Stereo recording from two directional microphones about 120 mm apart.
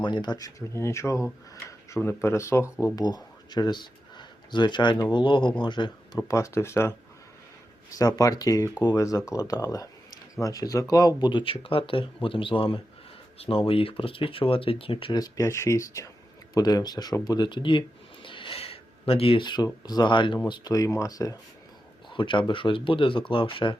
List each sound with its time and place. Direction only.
0.0 s speech: 40° left (ahead or behind)
6.1 s speech: 25° left (ahead or behind)
7.9 s speech: 30° left (ahead or behind); by 15.1 s 50° left (ahead or behind)
15.1 s speech: 30° left (ahead or behind)
17.2 s a sound: 35° left (ahead or behind)
19.6 s speech: 35° left (ahead or behind)
20.5 s speech: 30° left (ahead or behind)
22.1 s speech: 40° left (ahead or behind)